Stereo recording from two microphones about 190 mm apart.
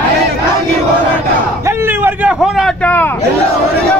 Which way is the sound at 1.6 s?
15° right (ahead or behind).